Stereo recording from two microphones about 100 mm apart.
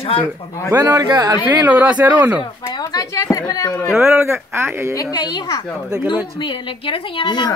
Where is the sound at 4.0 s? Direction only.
25° right (ahead or behind).